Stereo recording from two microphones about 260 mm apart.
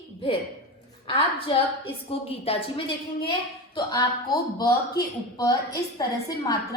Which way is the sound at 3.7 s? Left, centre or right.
Centre.